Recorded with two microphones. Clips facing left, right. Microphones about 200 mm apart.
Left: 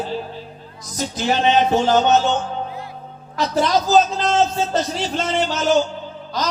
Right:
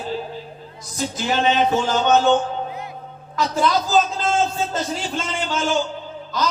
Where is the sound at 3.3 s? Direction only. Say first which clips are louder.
Left 1 dB; 40° left (ahead or behind).